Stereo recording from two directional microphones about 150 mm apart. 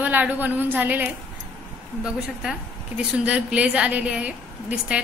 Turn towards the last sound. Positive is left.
turn(degrees=-5)  # may be behind; listen again after turning